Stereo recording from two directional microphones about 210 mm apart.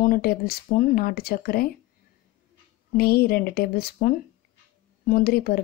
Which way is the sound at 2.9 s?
45° left (ahead or behind).